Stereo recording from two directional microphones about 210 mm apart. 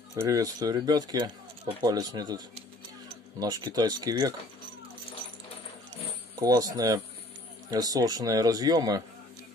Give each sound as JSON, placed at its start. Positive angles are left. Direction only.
{"t": 0.1, "sound": "a man's voice", "side_deg": -15}
{"t": 6.4, "sound": "a man's voice", "side_deg": -15}